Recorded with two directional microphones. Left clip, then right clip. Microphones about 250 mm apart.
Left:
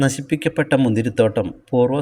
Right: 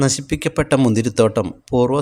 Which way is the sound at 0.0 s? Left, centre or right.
Centre.